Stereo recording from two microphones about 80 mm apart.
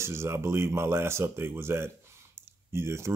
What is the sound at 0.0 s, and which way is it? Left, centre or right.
Speech, right.